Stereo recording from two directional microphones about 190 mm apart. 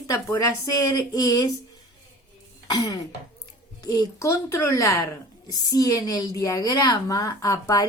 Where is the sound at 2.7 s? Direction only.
20° left (ahead or behind).